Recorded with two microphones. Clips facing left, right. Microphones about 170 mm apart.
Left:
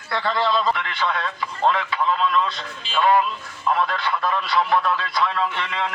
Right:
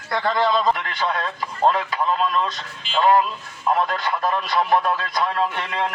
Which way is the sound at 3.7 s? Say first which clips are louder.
Right 1 dB; 40° right (ahead or behind).